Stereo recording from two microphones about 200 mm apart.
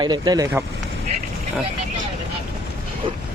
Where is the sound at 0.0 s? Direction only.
20° right (ahead or behind).